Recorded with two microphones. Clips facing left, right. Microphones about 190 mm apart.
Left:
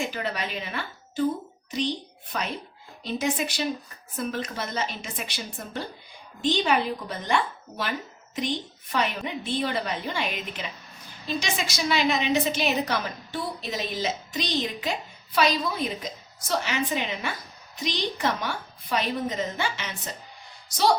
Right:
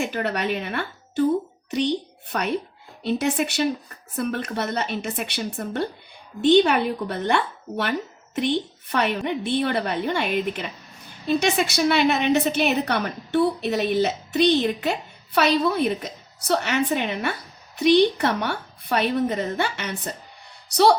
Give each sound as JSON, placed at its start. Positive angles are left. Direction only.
{"t": 0.0, "sound": "a woman's voice", "side_deg": -65}